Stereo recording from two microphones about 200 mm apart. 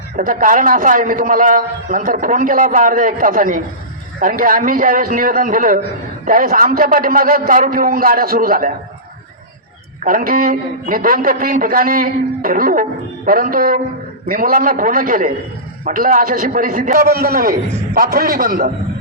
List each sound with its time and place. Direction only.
0.2 s a man's voice: 45° right (ahead or behind)
10.0 s a man's voice: 45° right (ahead or behind)